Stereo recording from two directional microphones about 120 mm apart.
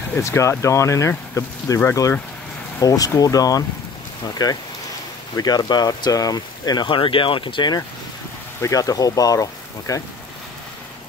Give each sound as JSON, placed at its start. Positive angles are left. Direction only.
{"t": 0.2, "sound": "speech", "side_deg": 25}
{"t": 8.6, "sound": "speech", "side_deg": 30}